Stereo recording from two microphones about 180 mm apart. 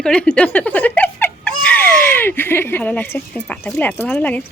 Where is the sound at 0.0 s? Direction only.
5° left (ahead or behind).